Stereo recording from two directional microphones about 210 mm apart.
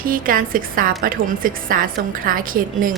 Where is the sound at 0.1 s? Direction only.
40° right (ahead or behind).